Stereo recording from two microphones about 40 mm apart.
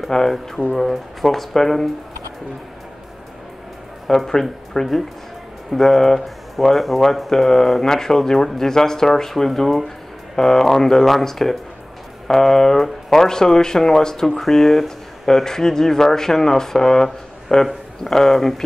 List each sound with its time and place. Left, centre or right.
0.1 s speech: centre
0.7 s speech: centre
4.3 s speech: centre